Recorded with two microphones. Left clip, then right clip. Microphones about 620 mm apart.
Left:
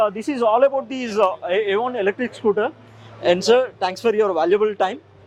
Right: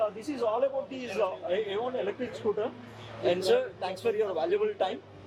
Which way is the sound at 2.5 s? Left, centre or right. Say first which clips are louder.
Left 11 dB; left.